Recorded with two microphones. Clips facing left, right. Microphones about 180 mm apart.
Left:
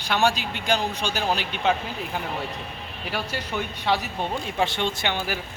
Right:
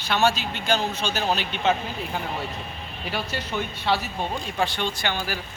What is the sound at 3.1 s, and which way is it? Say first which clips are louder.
Speech: even; 10° left (ahead or behind).